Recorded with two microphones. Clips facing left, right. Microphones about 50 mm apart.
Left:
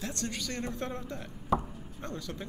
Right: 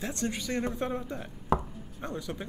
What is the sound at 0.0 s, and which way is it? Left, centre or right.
Speech, right.